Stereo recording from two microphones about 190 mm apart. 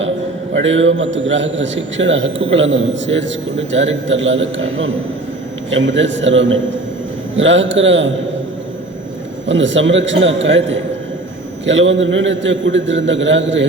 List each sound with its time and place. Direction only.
0.5 s a man's voice: 85° right
9.5 s a man's voice: 80° right